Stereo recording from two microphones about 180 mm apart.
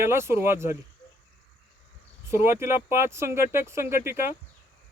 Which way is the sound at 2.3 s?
15° right (ahead or behind).